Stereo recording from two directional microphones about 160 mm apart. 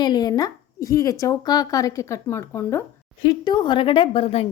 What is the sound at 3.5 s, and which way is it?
A woman's voice, 30° left (ahead or behind).